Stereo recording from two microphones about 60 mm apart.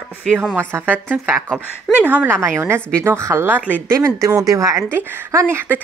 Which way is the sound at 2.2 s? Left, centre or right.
Right.